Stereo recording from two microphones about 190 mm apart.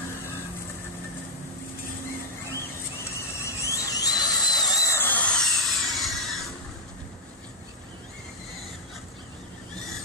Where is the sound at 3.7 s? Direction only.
20° left (ahead or behind).